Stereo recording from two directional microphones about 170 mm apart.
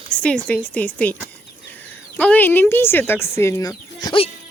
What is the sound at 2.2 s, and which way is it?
Speech, 10° left (ahead or behind).